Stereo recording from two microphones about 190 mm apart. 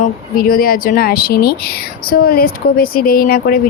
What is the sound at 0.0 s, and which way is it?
A woman's voice, 50° left (ahead or behind).